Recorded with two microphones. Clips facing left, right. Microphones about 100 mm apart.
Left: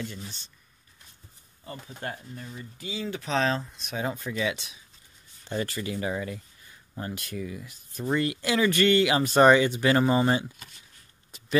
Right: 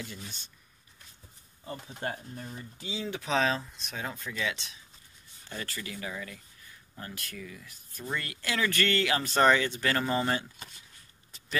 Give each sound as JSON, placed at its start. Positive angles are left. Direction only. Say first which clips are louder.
{"t": 2.3, "sound": "speech", "louder": "left 1 dB", "side_deg": -35}
{"t": 2.9, "sound": "speech", "louder": "left 1 dB", "side_deg": -15}
{"t": 3.9, "sound": "speech", "louder": "left 7 dB", "side_deg": 15}
{"t": 5.5, "sound": "speech", "louder": "left 9 dB", "side_deg": 25}